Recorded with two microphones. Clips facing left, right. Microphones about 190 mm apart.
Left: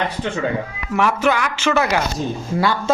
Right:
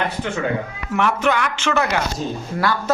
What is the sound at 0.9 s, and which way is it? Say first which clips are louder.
Speech: left 1 dB; 5° left (ahead or behind).